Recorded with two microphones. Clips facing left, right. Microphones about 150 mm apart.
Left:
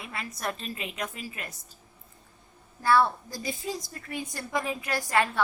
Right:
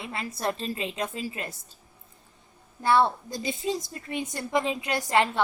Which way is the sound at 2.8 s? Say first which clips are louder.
Right 1 dB; 25° right (ahead or behind).